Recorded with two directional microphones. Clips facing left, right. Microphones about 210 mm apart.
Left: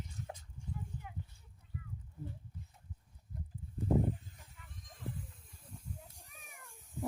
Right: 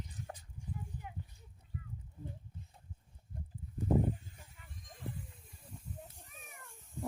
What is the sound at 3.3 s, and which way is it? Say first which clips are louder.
Horse: left 1 dB; 30° right (ahead or behind).